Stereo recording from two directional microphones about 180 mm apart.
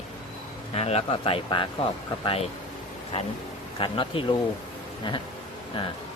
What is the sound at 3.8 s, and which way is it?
Speech, 30° left (ahead or behind).